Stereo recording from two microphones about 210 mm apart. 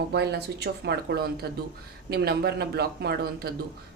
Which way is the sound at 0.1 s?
50° right (ahead or behind).